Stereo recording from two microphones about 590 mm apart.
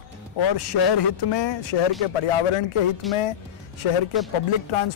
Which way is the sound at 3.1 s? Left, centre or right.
Centre.